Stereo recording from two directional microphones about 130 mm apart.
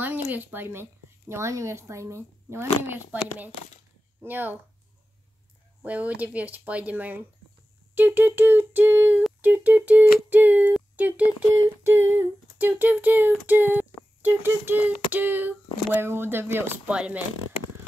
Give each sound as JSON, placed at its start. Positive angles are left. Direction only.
{"t": 0.0, "sound": "speech", "side_deg": -15}
{"t": 5.8, "sound": "speech", "side_deg": -10}